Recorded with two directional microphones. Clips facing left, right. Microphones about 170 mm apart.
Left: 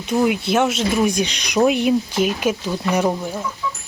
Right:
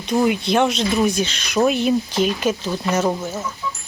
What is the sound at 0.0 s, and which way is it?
Speech, 5° left (ahead or behind).